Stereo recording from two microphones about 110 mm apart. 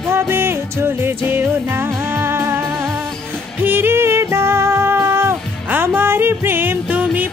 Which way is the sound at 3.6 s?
20° right (ahead or behind).